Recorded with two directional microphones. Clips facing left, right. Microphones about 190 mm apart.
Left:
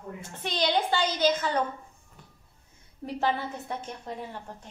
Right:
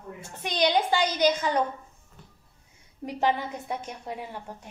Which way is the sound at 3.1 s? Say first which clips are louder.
Right 2 dB; 15° right (ahead or behind).